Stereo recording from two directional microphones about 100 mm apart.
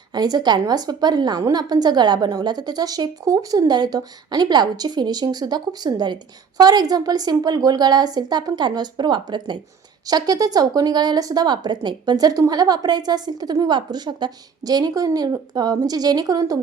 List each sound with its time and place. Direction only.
0.1 s a woman's voice: 45° right (ahead or behind)